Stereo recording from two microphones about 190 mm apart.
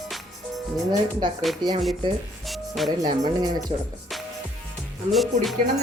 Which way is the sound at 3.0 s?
20° right (ahead or behind).